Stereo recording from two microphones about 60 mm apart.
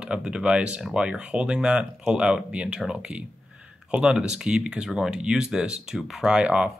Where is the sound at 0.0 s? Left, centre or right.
Centre.